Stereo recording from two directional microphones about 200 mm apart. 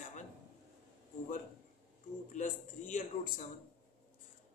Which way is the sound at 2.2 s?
40° left (ahead or behind).